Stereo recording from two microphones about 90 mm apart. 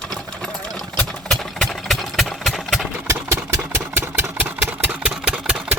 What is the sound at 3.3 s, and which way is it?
Engine, 25° right (ahead or behind).